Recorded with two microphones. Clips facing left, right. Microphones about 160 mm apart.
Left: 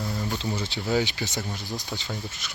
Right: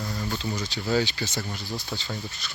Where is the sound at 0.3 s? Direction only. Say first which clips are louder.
Left 1 dB; 25° left (ahead or behind).